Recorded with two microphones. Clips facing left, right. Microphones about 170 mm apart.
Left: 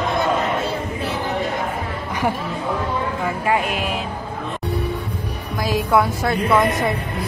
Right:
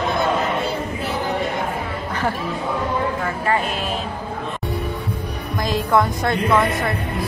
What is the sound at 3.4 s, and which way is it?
Speech, 10° left (ahead or behind).